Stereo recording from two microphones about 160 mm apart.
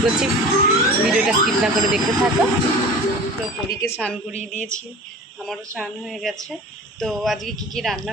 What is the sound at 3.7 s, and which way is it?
Speech, 15° left (ahead or behind).